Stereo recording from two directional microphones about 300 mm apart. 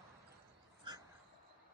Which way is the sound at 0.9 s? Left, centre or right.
Centre.